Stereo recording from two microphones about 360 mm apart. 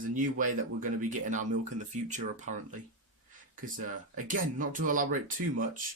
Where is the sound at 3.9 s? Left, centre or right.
Right.